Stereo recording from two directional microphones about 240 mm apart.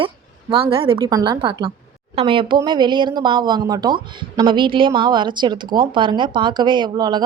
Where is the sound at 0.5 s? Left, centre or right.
Right.